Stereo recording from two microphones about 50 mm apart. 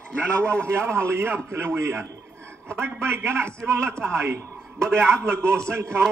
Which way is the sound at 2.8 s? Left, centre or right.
Right.